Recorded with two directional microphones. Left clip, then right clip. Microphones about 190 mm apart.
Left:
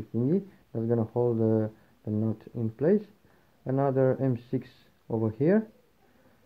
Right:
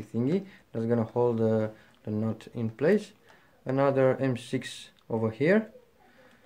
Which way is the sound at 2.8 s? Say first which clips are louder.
Right 1 dB; 25° left (ahead or behind).